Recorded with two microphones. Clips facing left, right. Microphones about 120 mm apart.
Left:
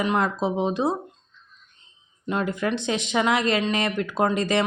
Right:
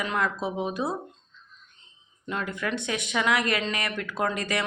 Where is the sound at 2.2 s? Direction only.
25° left (ahead or behind).